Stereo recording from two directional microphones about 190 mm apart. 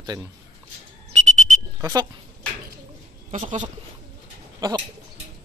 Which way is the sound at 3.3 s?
40° right (ahead or behind).